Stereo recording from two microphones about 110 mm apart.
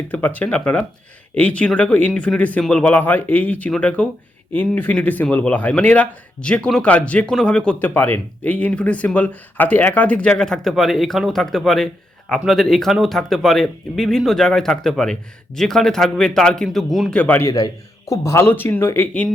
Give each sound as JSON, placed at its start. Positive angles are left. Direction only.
{"t": 0.1, "sound": "speech", "side_deg": 15}
{"t": 7.9, "sound": "speech", "side_deg": 20}
{"t": 17.2, "sound": "speech", "side_deg": 15}
{"t": 17.4, "sound": "speech", "side_deg": 30}